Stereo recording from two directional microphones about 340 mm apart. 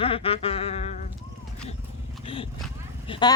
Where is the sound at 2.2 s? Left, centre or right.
Centre.